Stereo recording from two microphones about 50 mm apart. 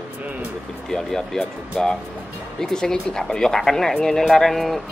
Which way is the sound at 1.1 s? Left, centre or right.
Centre.